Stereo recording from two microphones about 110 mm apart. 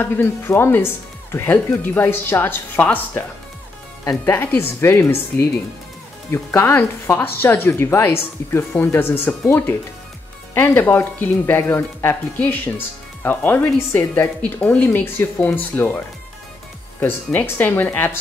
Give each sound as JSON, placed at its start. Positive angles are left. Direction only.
{"t": 0.0, "sound": "speech", "side_deg": 20}
{"t": 17.0, "sound": "speech", "side_deg": 20}